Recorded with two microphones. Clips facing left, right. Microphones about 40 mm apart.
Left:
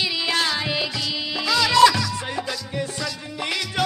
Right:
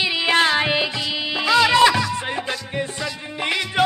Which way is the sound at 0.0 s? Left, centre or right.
Right.